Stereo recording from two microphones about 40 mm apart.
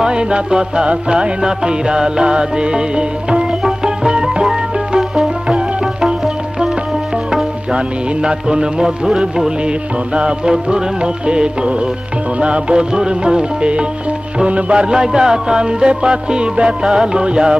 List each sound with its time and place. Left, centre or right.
0.0 s music: right
7.7 s music: right